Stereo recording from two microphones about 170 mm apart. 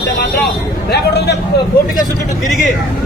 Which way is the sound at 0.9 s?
80° left.